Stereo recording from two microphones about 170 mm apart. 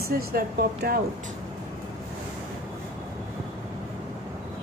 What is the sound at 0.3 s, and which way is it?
Speech, 65° right (ahead or behind).